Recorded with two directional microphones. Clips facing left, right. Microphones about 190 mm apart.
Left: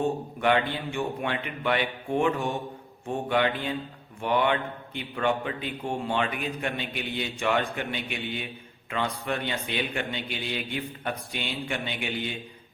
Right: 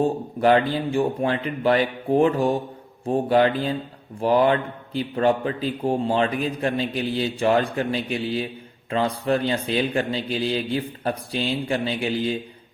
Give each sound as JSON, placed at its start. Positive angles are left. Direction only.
{"t": 0.0, "sound": "a man's voice", "side_deg": -35}